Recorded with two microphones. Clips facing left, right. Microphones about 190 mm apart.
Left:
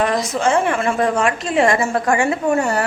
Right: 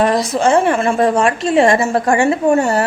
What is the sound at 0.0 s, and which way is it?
A woman's voice, 35° right (ahead or behind).